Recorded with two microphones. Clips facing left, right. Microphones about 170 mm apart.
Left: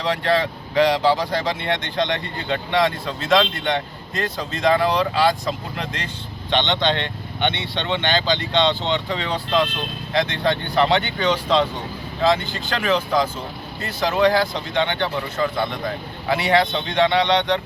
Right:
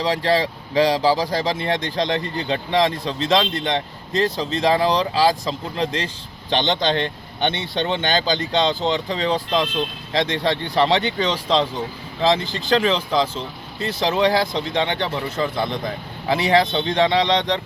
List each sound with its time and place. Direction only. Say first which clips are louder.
0.0 s speech: right 1 dB; 35° right (ahead or behind)